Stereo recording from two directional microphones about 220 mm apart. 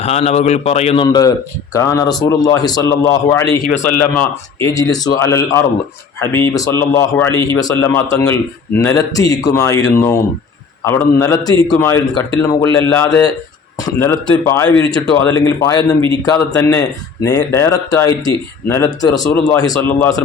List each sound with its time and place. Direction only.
0.0 s a man's voice: 30° left (ahead or behind)
1.0 s speech: 15° left (ahead or behind)